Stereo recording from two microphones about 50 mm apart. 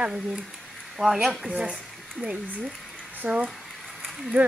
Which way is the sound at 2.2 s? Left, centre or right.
Right.